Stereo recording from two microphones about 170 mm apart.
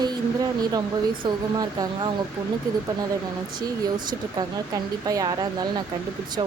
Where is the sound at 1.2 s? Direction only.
25° right (ahead or behind).